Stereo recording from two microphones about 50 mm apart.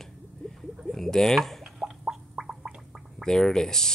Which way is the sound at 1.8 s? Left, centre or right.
Centre.